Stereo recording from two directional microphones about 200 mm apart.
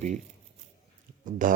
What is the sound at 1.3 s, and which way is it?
Speech, 40° right (ahead or behind).